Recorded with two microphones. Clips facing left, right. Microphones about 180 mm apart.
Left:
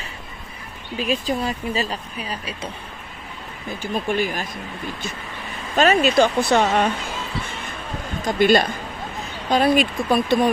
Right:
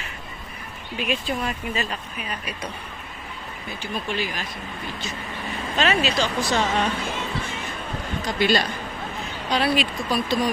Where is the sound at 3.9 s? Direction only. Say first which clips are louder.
Left 6 dB; 50° left (ahead or behind).